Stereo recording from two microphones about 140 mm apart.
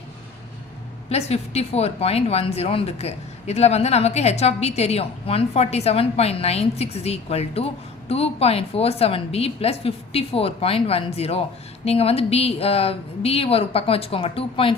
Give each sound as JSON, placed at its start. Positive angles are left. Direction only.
{"t": 1.1, "sound": "a woman's voice", "side_deg": 50}